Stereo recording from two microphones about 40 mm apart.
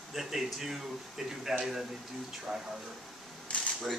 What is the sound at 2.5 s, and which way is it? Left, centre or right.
Speech, right.